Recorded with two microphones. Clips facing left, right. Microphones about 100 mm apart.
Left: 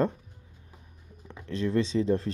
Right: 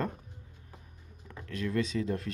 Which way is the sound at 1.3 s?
30° left (ahead or behind).